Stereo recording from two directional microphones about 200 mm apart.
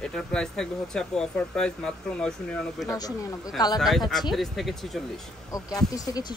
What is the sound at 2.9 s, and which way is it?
Speech, 20° left (ahead or behind).